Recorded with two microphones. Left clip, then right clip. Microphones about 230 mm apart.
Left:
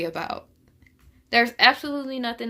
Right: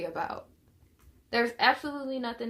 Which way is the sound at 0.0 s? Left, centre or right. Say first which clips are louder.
Left 5 dB; left.